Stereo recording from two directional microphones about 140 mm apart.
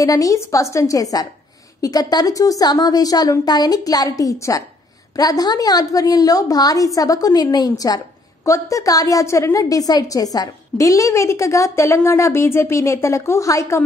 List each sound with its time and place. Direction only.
0.0 s a woman's voice: 25° left (ahead or behind)